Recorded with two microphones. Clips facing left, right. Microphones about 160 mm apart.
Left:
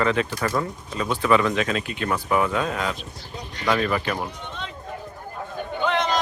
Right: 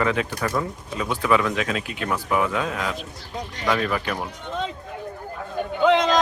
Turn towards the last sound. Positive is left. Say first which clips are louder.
# right 5 dB
turn(degrees=-90)